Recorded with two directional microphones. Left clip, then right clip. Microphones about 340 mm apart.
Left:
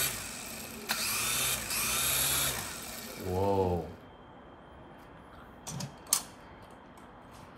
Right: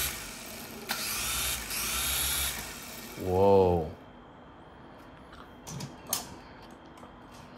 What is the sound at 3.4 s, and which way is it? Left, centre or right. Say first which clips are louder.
Speech: right 8 dB; right.